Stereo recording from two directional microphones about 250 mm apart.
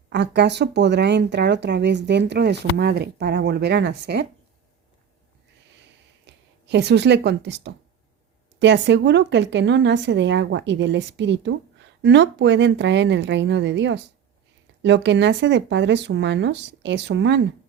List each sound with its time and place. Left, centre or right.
0.1 s speech: right
6.2 s speech: right